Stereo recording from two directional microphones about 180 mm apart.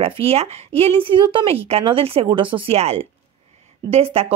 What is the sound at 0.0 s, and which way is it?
Speech, 35° right (ahead or behind).